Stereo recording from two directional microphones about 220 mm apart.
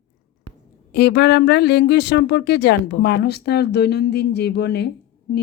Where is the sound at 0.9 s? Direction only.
50° left (ahead or behind).